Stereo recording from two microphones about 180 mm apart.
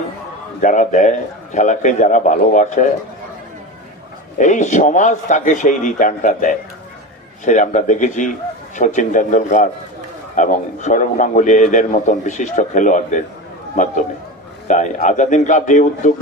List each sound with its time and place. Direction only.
0.6 s a man's voice: 45° left (ahead or behind)
4.4 s a man's voice: 45° left (ahead or behind)
14.7 s a man's voice: 45° left (ahead or behind)